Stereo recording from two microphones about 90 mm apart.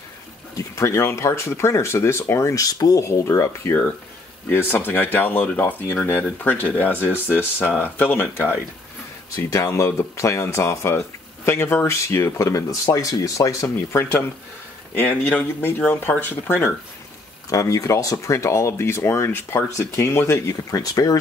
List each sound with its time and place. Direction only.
0.6 s speech: 35° left (ahead or behind)
4.5 s speech: 20° left (ahead or behind)
9.3 s speech: 40° left (ahead or behind)
15.0 s speech: 15° left (ahead or behind)
17.5 s speech: 40° left (ahead or behind)